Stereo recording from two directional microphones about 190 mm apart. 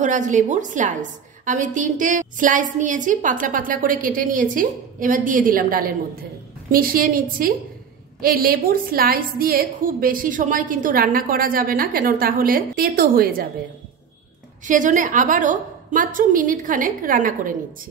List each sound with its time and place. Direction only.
0.0 s a woman's voice: 40° right (ahead or behind)
14.7 s a woman's voice: 45° right (ahead or behind)